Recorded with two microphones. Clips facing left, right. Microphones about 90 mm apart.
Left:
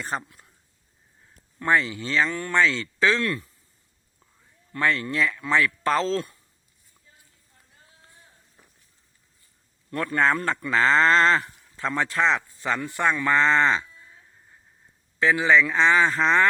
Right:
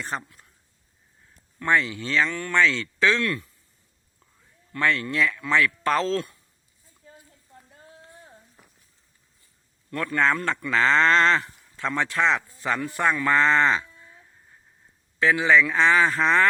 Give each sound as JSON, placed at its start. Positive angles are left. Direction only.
{"t": 0.0, "sound": "speech", "side_deg": 5}
{"t": 1.5, "sound": "speech", "side_deg": 5}
{"t": 4.7, "sound": "speech", "side_deg": 5}
{"t": 9.9, "sound": "speech", "side_deg": 30}
{"t": 10.2, "sound": "speech", "side_deg": 5}
{"t": 15.2, "sound": "speech", "side_deg": 0}